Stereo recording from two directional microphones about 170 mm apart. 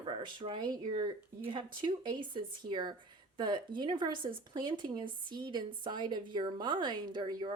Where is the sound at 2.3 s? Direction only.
25° right (ahead or behind).